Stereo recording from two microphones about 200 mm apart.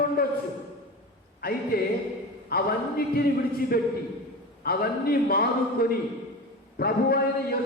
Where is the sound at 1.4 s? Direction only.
50° left (ahead or behind).